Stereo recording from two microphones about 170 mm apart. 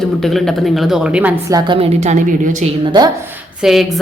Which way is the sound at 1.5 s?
30° right (ahead or behind).